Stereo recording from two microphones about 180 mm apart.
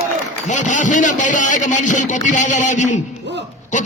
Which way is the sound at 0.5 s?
45° left (ahead or behind).